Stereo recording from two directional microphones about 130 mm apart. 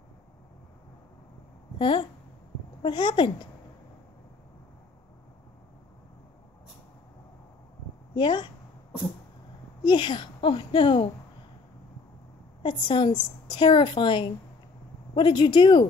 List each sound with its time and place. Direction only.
1.8 s a woman's voice: 40° left (ahead or behind)
8.1 s speech: 35° left (ahead or behind)
9.8 s a woman's voice: 35° left (ahead or behind)
12.6 s a woman's voice: 40° left (ahead or behind)